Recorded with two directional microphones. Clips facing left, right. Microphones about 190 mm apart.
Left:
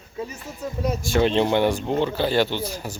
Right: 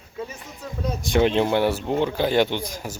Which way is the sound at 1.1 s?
15° right (ahead or behind).